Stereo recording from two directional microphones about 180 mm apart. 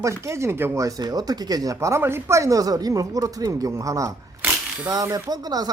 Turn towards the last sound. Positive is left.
turn(degrees=-20)  # may be behind; listen again after turning